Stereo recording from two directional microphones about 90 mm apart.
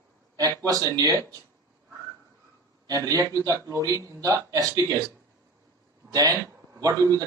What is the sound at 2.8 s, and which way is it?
A man's voice, 40° right (ahead or behind).